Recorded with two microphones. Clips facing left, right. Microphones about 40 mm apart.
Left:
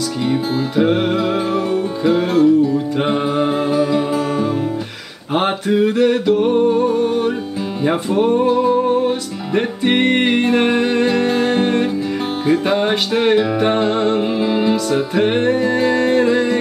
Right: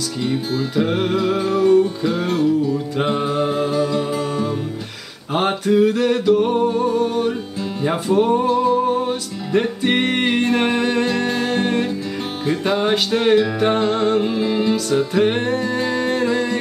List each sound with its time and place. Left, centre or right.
0.2 s music: centre